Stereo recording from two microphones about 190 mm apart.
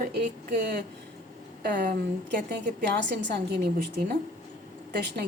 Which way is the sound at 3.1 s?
65° right (ahead or behind).